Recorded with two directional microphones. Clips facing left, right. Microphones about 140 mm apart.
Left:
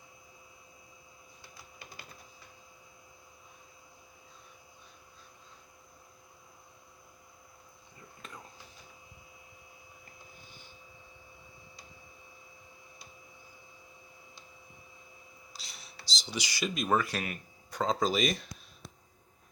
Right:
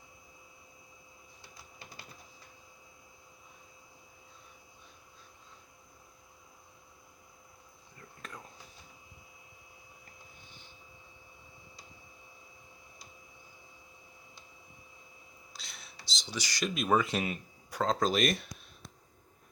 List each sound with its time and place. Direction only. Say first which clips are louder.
15.5 s whispering: even; centre (ahead or behind)
16.2 s speech: even; 10° left (ahead or behind)
16.6 s speech: right 1 dB; centre (ahead or behind)
17.0 s speech: right 3 dB; 20° right (ahead or behind)
17.7 s speech: even; centre (ahead or behind)